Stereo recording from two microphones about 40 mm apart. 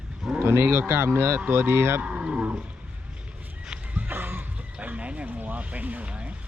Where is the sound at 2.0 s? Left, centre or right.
Right.